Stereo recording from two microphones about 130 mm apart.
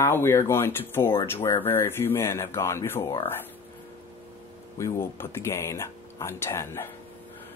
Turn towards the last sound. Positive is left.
turn(degrees=20)  # may be behind; listen again after turning